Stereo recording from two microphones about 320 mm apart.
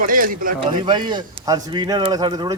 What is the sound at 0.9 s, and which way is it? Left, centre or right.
Speech, centre.